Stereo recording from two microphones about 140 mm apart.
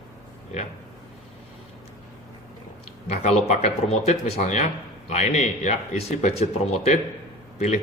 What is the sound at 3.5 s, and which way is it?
Speech, 50° left (ahead or behind).